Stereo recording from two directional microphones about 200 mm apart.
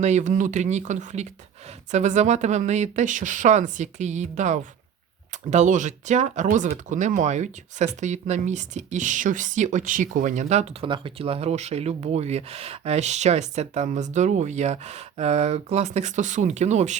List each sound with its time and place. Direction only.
0.0 s speech: 35° right (ahead or behind)